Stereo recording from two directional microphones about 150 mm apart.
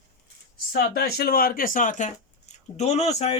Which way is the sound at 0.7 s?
85° left.